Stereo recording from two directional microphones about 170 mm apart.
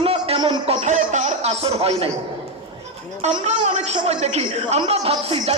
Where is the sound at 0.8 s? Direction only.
45° right (ahead or behind).